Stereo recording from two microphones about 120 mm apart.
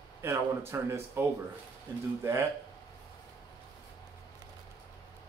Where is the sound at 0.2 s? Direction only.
20° right (ahead or behind).